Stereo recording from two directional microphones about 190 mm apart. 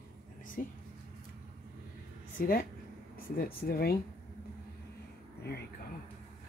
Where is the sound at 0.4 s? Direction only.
45° left (ahead or behind).